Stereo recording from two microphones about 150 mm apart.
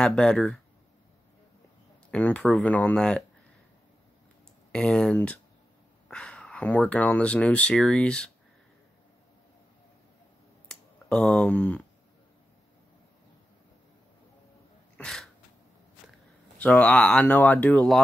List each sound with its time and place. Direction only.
0.0 s speech: 5° left (ahead or behind)
2.0 s speech: 10° left (ahead or behind)
4.7 s speech: 5° left (ahead or behind)
10.7 s speech: 5° left (ahead or behind)
15.0 s sneeze: 5° left (ahead or behind)
16.5 s speech: 10° left (ahead or behind)